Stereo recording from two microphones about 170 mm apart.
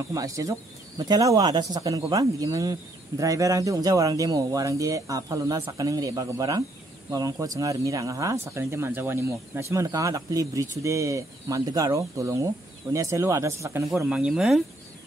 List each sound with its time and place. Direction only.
0.1 s speech: 20° right (ahead or behind); by 14.6 s 5° right (ahead or behind)